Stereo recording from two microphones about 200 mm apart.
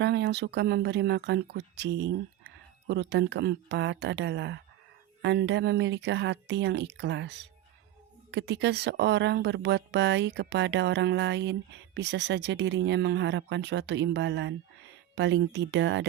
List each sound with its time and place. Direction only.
0.0 s speech: 60° right (ahead or behind)